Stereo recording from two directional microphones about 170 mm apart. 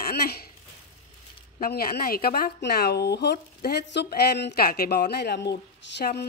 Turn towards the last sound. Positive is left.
turn(degrees=75)  # may be behind; listen again after turning